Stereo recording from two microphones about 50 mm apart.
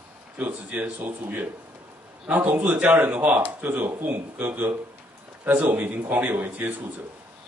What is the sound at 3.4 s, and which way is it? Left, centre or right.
Speech, right.